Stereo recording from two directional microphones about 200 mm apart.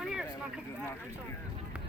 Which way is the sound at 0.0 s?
5° right (ahead or behind).